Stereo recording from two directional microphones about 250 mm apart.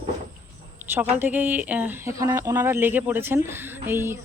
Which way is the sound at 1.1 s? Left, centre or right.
Centre.